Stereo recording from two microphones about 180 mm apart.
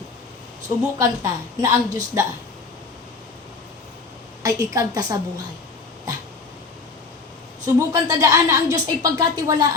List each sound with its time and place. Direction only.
0.9 s a woman's voice: 15° right (ahead or behind)
4.4 s a woman's voice: 20° right (ahead or behind)
7.6 s a woman's voice: 20° right (ahead or behind)